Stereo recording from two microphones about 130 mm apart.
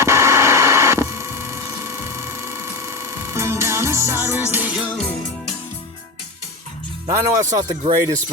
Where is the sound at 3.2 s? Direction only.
20° right (ahead or behind).